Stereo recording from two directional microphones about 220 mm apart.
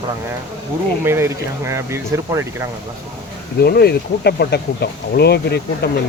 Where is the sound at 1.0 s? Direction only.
10° right (ahead or behind).